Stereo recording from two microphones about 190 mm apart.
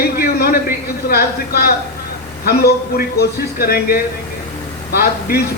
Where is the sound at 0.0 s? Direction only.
55° left (ahead or behind).